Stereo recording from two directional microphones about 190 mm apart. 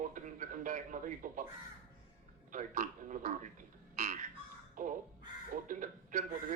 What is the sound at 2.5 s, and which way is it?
A man's voice, 45° right (ahead or behind).